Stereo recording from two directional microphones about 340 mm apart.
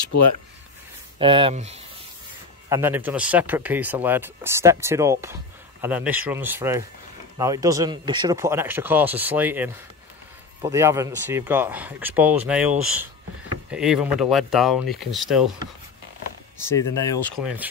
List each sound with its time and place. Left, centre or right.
0.1 s speech: left
1.1 s speech: centre
2.7 s speech: centre
16.5 s speech: centre